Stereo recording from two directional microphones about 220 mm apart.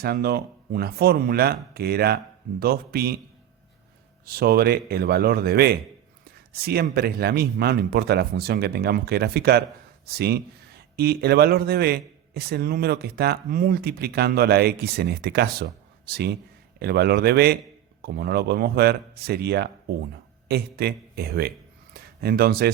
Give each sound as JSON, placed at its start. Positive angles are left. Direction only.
{"t": 0.0, "sound": "a man's voice", "side_deg": -45}
{"t": 4.3, "sound": "a man's voice", "side_deg": -45}